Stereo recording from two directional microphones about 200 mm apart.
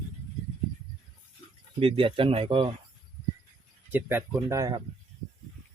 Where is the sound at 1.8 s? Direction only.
25° right (ahead or behind).